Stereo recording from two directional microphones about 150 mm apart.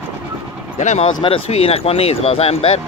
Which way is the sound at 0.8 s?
50° left (ahead or behind).